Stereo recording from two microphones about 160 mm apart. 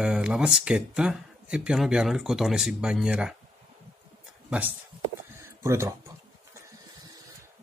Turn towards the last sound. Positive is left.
turn(degrees=-20)  # may be behind; listen again after turning